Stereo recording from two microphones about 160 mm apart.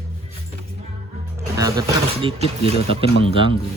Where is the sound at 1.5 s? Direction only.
25° right (ahead or behind).